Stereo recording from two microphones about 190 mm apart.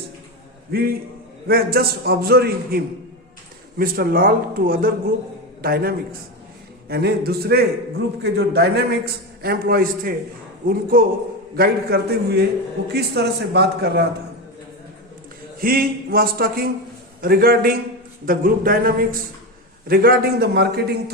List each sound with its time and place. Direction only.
0.7 s a man's voice: 55° right (ahead or behind)
15.6 s a man's voice: 50° right (ahead or behind)